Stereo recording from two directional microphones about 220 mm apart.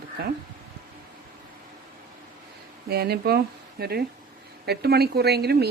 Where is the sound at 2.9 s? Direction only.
45° right (ahead or behind).